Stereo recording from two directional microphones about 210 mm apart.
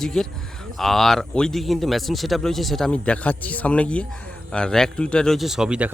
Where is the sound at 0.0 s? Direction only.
Centre (ahead or behind).